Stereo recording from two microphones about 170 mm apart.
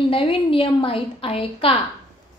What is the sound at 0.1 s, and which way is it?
A woman's voice, 30° left (ahead or behind).